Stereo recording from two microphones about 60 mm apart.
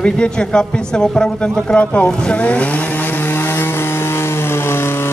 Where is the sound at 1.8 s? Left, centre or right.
Left.